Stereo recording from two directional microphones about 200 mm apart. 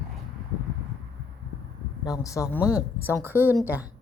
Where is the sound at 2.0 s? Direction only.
15° left (ahead or behind).